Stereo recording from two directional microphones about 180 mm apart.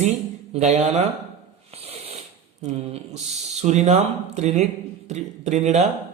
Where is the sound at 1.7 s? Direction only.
35° right (ahead or behind).